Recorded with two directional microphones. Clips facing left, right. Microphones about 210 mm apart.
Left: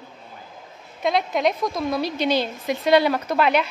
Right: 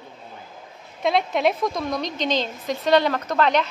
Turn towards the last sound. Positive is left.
turn(degrees=10)  # may be behind; listen again after turning